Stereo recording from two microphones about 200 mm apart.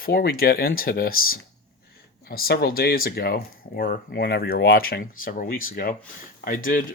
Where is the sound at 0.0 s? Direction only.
50° left (ahead or behind).